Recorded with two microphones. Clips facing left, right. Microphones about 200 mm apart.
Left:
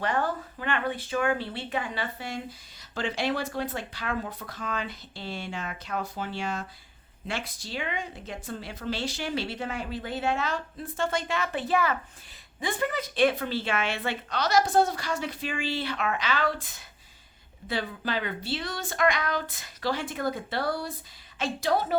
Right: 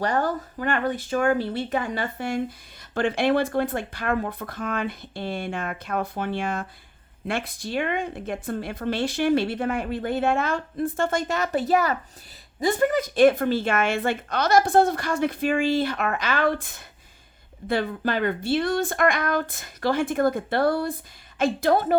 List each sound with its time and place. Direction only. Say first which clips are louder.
0.0 s a woman's voice: right 4 dB; 40° right (ahead or behind)